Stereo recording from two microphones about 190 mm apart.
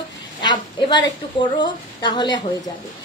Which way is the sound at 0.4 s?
25° left (ahead or behind).